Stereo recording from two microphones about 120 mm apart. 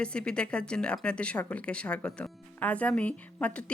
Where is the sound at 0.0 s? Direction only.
10° left (ahead or behind).